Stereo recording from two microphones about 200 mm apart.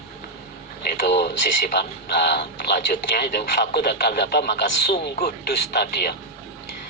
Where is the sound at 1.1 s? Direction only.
60° left (ahead or behind).